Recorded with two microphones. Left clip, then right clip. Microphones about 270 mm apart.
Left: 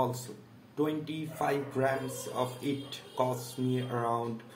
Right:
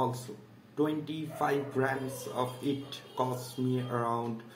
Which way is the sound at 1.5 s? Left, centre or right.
Centre.